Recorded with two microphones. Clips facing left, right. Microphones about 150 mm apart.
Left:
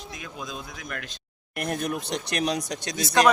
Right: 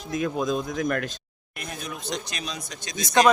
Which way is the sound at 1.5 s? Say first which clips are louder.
Left 7 dB; 65° left (ahead or behind).